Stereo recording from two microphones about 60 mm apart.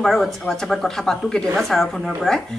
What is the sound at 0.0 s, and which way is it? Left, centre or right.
Speech, centre.